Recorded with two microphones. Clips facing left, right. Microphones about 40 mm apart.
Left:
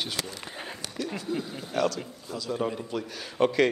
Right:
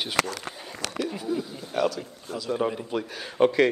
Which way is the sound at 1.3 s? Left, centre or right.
Left.